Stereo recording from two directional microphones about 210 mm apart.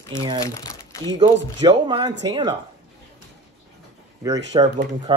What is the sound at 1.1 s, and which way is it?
Speech, 20° right (ahead or behind).